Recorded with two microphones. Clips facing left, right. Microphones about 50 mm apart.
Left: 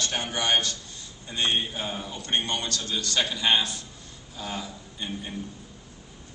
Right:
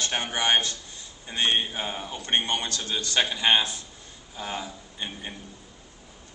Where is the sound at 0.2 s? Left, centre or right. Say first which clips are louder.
Right 1 dB; right.